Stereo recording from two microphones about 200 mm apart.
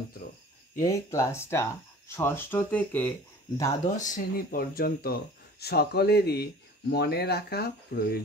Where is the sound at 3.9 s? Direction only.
40° left (ahead or behind).